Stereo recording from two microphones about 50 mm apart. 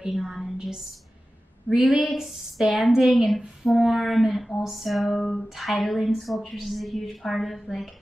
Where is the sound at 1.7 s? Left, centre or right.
Right.